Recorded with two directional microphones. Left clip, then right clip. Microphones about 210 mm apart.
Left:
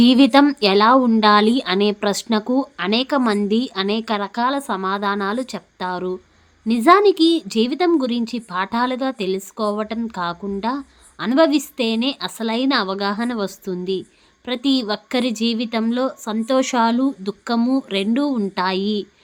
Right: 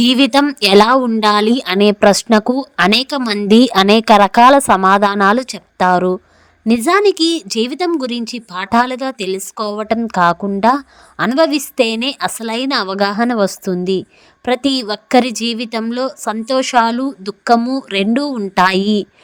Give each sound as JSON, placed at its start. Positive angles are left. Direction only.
{"t": 0.0, "sound": "a woman's voice", "side_deg": -35}